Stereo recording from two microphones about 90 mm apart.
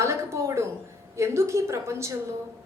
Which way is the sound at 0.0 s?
30° right (ahead or behind).